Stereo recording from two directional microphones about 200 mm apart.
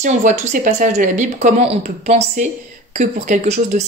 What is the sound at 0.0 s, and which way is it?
Speech, 40° right (ahead or behind).